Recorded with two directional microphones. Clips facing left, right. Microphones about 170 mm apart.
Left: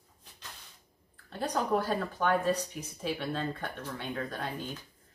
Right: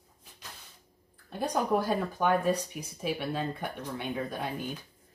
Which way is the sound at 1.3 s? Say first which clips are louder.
Right 2 dB; 15° right (ahead or behind).